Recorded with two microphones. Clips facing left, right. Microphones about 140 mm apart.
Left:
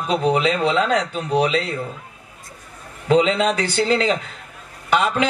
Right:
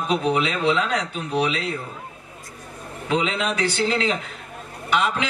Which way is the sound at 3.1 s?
35° left (ahead or behind).